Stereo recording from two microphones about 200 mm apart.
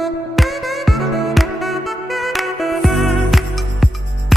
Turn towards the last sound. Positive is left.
turn(degrees=0)  # may be behind; listen again after turning